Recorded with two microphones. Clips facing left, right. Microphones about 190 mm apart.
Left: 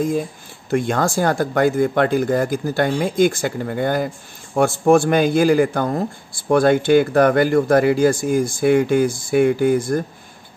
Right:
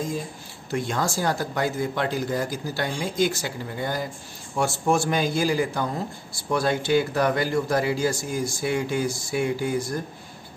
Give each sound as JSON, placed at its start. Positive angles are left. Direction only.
{"t": 0.7, "sound": "a man's voice", "side_deg": 55}